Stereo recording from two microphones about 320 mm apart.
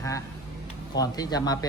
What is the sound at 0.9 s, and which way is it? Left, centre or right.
Speech, centre.